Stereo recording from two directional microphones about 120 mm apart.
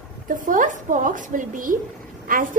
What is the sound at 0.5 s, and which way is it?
A woman's voice, 90° right.